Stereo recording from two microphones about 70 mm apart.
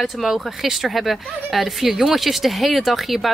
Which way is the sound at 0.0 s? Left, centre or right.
Centre.